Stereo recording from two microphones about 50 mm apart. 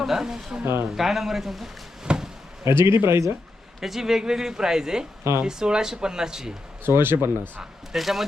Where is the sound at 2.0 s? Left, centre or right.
Centre.